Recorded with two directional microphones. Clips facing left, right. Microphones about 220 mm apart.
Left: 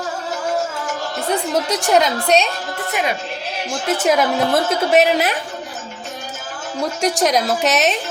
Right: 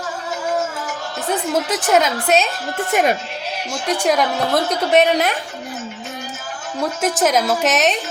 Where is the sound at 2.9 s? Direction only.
45° right (ahead or behind).